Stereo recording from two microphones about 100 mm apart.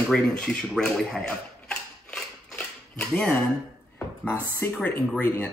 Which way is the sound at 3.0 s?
10° left (ahead or behind).